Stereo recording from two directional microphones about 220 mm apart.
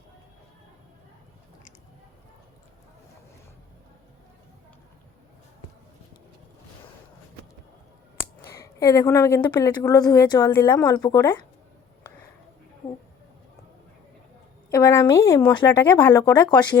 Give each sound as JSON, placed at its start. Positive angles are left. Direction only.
{"t": 8.2, "sound": "speech", "side_deg": 10}
{"t": 14.7, "sound": "a sound", "side_deg": 15}
{"t": 15.8, "sound": "speech", "side_deg": 10}